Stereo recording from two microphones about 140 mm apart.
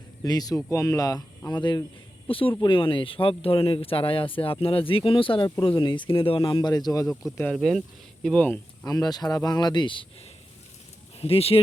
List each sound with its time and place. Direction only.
0.2 s speech: 25° left (ahead or behind)
7.1 s speech: centre (ahead or behind)
8.8 s speech: 25° left (ahead or behind)
11.2 s speech: 45° left (ahead or behind)